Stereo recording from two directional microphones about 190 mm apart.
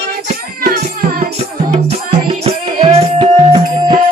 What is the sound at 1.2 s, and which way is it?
Music, 35° right (ahead or behind).